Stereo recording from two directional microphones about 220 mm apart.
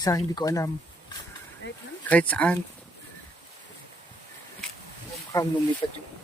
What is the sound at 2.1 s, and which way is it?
Speech, 5° left (ahead or behind).